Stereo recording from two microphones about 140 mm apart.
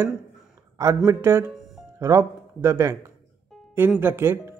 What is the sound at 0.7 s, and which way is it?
Speech, 20° right (ahead or behind).